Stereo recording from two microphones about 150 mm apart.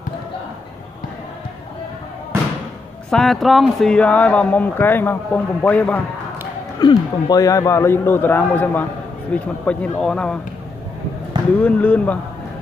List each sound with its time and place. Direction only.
3.1 s speech: centre (ahead or behind)
6.8 s speech: 25° left (ahead or behind); by 10.4 s 5° left (ahead or behind)
11.6 s speech: 10° left (ahead or behind)